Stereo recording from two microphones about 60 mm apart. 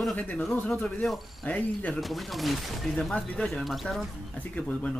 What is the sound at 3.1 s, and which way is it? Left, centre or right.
Speech, centre.